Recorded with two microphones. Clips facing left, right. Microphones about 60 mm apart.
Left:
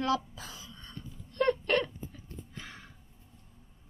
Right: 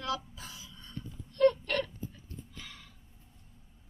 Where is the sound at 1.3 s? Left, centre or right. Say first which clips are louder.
Right 2 dB; left.